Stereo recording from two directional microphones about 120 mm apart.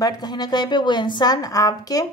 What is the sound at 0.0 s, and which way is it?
A woman's voice, 35° left (ahead or behind).